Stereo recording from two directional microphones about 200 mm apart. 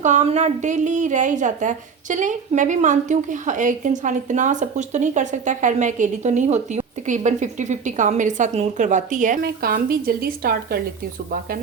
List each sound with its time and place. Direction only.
0.0 s a woman's voice: 35° right (ahead or behind)